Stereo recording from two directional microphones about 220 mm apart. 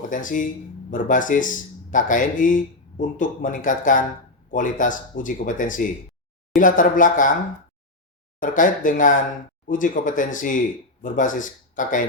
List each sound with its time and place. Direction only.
0.1 s speech: 35° left (ahead or behind)
8.4 s speech: 35° left (ahead or behind)